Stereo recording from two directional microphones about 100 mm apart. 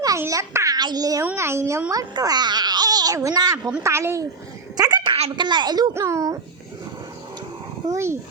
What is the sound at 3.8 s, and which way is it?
Speech, 25° right (ahead or behind).